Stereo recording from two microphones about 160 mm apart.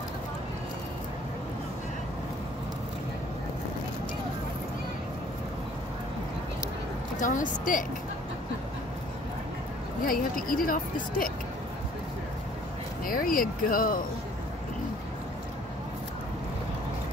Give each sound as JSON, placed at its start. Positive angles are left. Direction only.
{"t": 7.2, "sound": "a woman's voice", "side_deg": 55}
{"t": 10.0, "sound": "a woman's voice", "side_deg": 60}
{"t": 13.0, "sound": "a woman's voice", "side_deg": 60}